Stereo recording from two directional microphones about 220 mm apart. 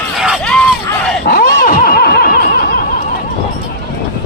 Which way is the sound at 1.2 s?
40° left (ahead or behind).